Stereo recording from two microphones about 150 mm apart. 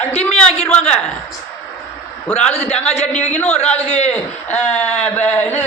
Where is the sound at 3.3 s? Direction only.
10° left (ahead or behind).